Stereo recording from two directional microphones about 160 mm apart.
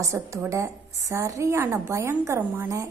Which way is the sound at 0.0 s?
20° right (ahead or behind).